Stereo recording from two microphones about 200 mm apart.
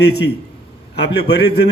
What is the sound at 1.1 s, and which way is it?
Speech, 55° left (ahead or behind).